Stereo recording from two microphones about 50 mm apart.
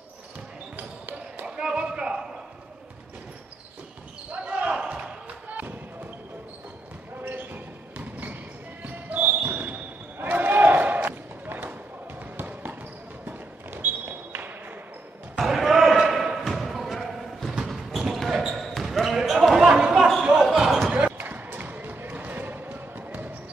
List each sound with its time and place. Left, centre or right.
0.7 s basketball bounce: right
1.4 s a sound: centre
4.3 s basketball bounce: right
5.5 s basketball bounce: right
7.2 s basketball bounce: right
13.2 s a sound: right
15.3 s basketball bounce: centre
21.2 s basketball bounce: right